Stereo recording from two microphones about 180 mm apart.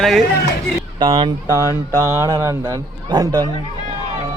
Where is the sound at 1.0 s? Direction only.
30° right (ahead or behind).